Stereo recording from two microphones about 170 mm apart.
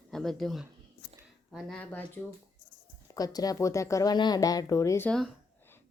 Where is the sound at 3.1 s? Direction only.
20° left (ahead or behind).